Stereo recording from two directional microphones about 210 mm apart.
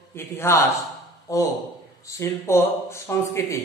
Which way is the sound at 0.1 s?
10° left (ahead or behind).